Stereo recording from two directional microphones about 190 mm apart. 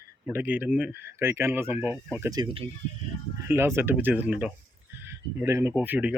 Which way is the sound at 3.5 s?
15° right (ahead or behind).